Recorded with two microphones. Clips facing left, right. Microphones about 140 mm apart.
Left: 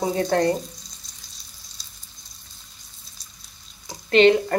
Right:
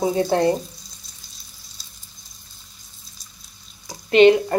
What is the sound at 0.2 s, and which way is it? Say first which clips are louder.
Speech: right 1 dB; 10° right (ahead or behind).